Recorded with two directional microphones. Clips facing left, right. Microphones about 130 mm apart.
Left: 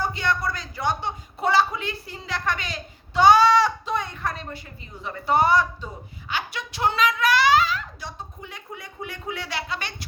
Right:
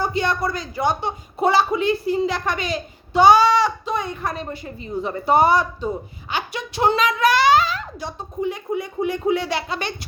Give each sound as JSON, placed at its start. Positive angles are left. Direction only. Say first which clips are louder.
{"t": 0.0, "sound": "a sound", "louder": "right 4 dB", "side_deg": -15}
{"t": 0.5, "sound": "a woman's voice", "louder": "right 5 dB", "side_deg": -15}
{"t": 4.4, "sound": "speech", "louder": "right 7 dB", "side_deg": -25}